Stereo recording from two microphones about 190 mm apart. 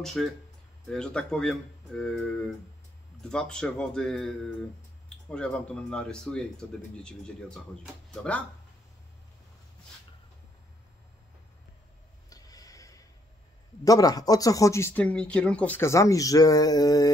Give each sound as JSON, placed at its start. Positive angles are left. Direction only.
{"t": 0.0, "sound": "speech", "side_deg": 0}
{"t": 5.3, "sound": "speech", "side_deg": 5}
{"t": 12.3, "sound": "a sound", "side_deg": 20}
{"t": 13.8, "sound": "speech", "side_deg": 20}